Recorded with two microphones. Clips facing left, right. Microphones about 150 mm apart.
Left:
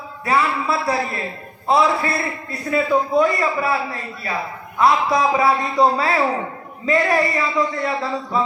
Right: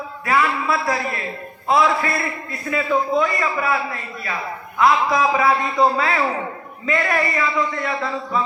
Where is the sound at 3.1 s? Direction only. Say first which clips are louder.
Left 3 dB; 35° left (ahead or behind).